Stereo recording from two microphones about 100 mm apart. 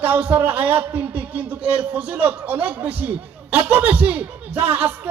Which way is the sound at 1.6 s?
75° right (ahead or behind).